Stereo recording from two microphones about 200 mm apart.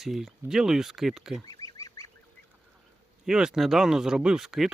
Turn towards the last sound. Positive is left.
turn(degrees=0)  # may be behind; listen again after turning